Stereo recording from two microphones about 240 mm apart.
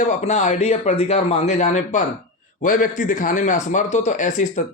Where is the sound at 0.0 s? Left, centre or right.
Left.